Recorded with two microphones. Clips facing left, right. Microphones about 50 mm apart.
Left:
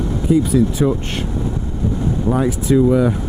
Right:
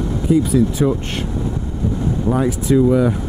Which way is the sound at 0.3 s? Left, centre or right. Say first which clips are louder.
Even; left.